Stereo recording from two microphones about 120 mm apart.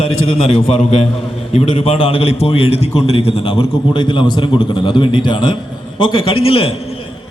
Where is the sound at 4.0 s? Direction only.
40° left (ahead or behind).